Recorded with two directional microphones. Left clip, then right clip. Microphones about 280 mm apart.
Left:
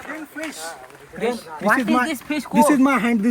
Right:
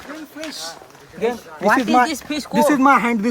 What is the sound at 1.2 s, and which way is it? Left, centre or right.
Speech, centre.